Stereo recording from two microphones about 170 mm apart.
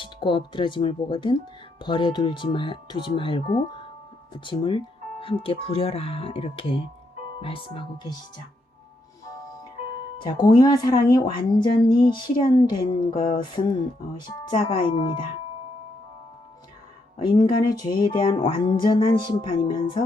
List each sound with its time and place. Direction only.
0.0 s speech: 30° left (ahead or behind)
10.4 s speech: 25° left (ahead or behind)
17.2 s speech: 25° left (ahead or behind)